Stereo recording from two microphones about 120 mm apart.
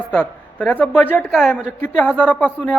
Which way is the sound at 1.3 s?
5° left (ahead or behind).